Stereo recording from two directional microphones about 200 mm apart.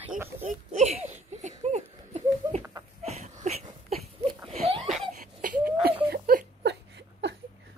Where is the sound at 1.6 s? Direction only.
35° right (ahead or behind).